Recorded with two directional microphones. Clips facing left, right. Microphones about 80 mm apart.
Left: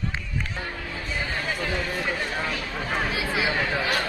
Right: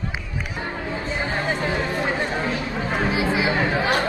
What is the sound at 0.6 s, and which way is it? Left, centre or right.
Music, right.